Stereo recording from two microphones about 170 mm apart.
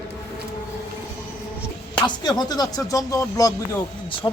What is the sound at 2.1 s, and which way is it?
Speech, 25° left (ahead or behind).